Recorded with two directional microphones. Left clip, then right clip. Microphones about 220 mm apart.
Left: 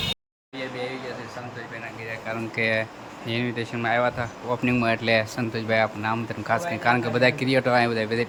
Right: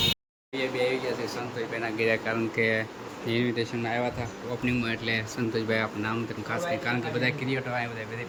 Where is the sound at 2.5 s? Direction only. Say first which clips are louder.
Left 5 dB; 10° left (ahead or behind).